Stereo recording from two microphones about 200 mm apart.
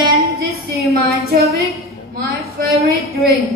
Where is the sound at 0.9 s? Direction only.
50° right (ahead or behind).